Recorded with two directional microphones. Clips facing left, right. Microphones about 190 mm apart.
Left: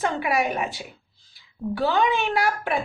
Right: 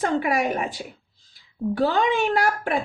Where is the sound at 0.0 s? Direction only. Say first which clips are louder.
Right 2 dB; 45° right (ahead or behind).